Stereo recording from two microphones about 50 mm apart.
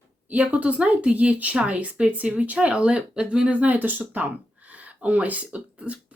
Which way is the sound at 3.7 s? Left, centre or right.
Right.